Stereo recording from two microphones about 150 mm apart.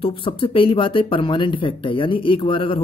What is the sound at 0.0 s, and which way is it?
Speech, 35° left (ahead or behind).